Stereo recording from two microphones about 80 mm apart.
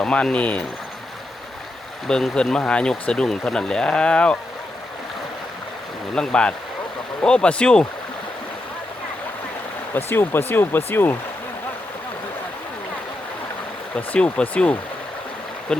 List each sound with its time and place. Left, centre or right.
0.0 s speech: centre
2.0 s speech: centre
6.1 s speech: centre
9.9 s speech: left
13.9 s speech: centre